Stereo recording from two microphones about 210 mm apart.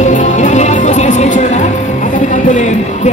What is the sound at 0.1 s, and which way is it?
Music, 35° left (ahead or behind).